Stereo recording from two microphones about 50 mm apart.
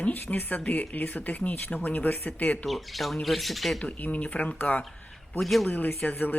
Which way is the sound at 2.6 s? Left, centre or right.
Centre.